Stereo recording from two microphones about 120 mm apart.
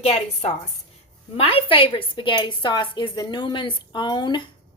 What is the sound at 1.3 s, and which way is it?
A woman's voice, 50° left (ahead or behind).